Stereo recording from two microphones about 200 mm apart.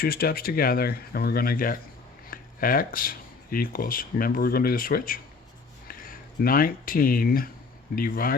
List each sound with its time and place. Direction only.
0.0 s speech: 50° left (ahead or behind)